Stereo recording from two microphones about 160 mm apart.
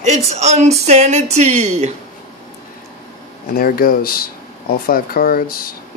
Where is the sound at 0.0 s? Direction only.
45° right (ahead or behind).